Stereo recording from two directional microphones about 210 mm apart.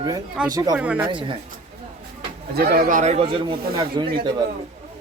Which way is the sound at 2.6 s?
45° right (ahead or behind).